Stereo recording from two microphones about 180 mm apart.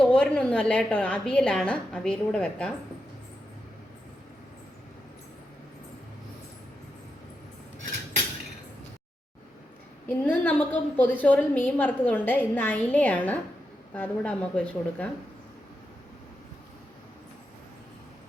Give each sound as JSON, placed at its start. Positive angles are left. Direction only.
{"t": 0.0, "sound": "a woman's voice", "side_deg": 5}
{"t": 10.1, "sound": "a woman's voice", "side_deg": 10}